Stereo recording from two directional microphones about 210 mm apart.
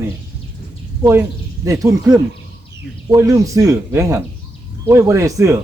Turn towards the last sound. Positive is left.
turn(degrees=-15)  # may be behind; listen again after turning